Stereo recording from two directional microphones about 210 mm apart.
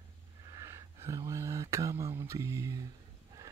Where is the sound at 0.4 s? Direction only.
15° right (ahead or behind).